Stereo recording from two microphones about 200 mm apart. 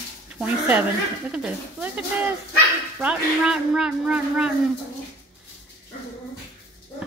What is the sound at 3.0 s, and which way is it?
Speech, 5° right (ahead or behind).